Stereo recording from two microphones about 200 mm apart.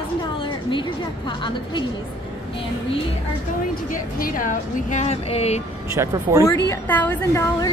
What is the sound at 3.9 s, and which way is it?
A woman's voice, 45° left (ahead or behind).